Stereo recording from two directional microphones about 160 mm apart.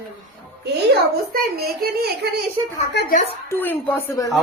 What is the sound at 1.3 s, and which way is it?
Speech, 70° right (ahead or behind).